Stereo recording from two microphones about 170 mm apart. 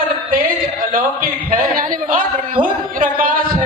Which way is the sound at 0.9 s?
55° right (ahead or behind).